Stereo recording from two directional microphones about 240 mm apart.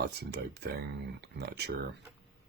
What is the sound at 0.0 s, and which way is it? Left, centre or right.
Speech, right.